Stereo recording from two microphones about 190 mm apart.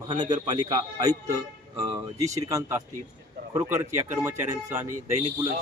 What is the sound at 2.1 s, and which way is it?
Speech, 15° right (ahead or behind).